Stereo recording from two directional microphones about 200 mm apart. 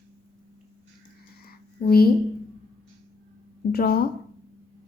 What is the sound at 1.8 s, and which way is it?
Speech, 50° left (ahead or behind).